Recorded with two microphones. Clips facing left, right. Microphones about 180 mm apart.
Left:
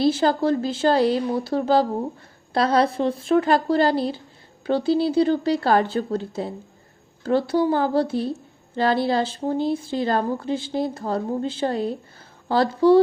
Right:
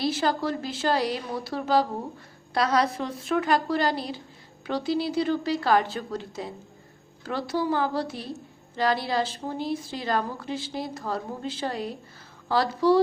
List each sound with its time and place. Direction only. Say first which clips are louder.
0.0 s speech: left 6 dB; 30° left (ahead or behind)